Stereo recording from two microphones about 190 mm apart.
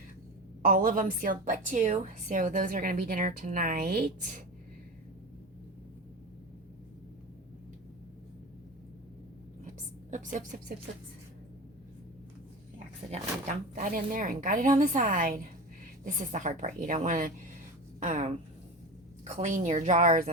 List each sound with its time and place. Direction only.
0.6 s a woman's voice: 50° right (ahead or behind)
9.6 s a sound: 40° right (ahead or behind)
13.7 s a woman's voice: 45° right (ahead or behind)